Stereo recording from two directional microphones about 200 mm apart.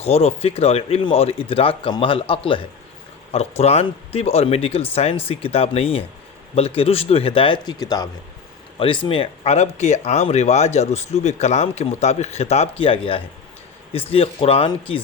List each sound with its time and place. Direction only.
0.0 s speech: 30° left (ahead or behind)